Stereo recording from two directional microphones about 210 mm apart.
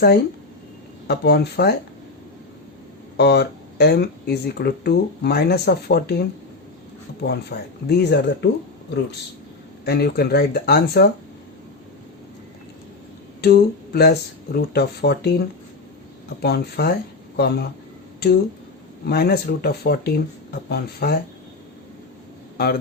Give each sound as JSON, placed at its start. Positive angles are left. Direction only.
{"t": 1.0, "sound": "speech", "side_deg": 50}
{"t": 3.2, "sound": "speech", "side_deg": 50}
{"t": 7.3, "sound": "speech", "side_deg": 50}
{"t": 9.8, "sound": "speech", "side_deg": 50}
{"t": 13.4, "sound": "speech", "side_deg": 50}
{"t": 16.4, "sound": "speech", "side_deg": 50}
{"t": 19.0, "sound": "speech", "side_deg": 50}
{"t": 22.5, "sound": "a man's voice", "side_deg": 50}